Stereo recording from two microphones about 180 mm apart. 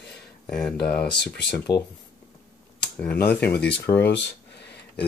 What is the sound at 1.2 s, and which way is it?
Speech, 70° left (ahead or behind).